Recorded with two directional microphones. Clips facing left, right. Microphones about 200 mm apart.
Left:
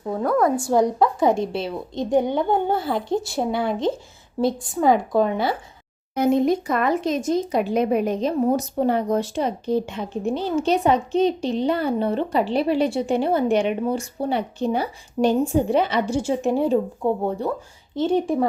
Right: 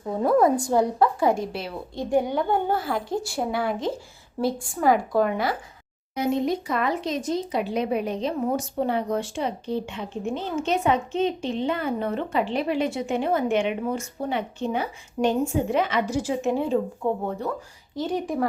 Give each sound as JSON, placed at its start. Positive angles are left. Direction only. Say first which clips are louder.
{"t": 0.3, "sound": "a woman's voice", "louder": "right 1 dB", "side_deg": -25}
{"t": 0.8, "sound": "a woman's voice", "louder": "left 4 dB", "side_deg": 15}
{"t": 6.1, "sound": "a woman's voice", "louder": "left 5 dB", "side_deg": 50}